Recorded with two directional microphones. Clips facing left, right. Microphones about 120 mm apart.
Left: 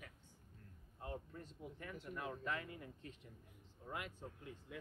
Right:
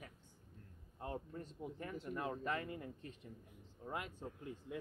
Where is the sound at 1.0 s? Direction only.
30° right (ahead or behind).